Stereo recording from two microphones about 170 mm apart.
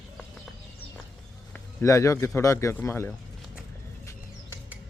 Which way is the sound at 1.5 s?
15° left (ahead or behind).